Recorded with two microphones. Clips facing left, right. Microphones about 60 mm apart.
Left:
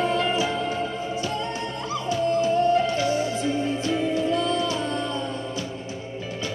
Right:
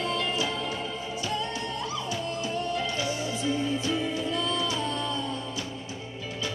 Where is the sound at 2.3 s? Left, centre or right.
Left.